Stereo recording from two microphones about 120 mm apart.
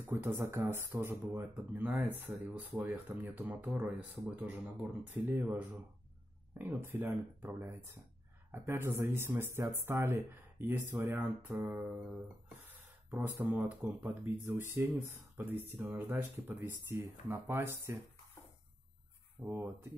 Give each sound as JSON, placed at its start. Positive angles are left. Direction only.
{"t": 0.0, "sound": "speech", "side_deg": -20}
{"t": 19.4, "sound": "speech", "side_deg": -20}